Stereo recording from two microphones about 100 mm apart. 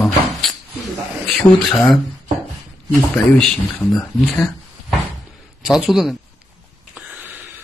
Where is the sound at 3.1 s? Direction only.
15° left (ahead or behind).